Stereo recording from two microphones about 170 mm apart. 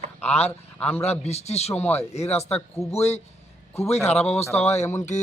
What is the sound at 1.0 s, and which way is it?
A man's voice, 40° left (ahead or behind).